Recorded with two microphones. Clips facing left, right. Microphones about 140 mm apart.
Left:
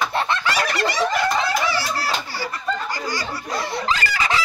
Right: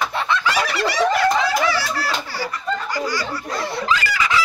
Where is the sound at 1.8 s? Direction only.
30° left (ahead or behind).